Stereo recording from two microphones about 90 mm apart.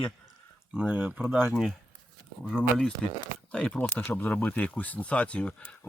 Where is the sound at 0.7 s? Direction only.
10° right (ahead or behind).